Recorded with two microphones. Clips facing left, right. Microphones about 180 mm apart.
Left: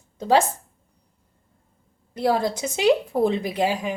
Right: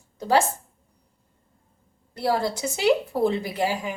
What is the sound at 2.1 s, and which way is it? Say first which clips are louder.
A woman's voice: left 2 dB; 20° left (ahead or behind).